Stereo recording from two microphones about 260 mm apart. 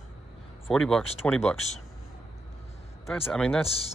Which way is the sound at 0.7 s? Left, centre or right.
Centre.